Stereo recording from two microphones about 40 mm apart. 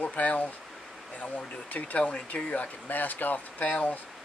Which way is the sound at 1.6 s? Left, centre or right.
Left.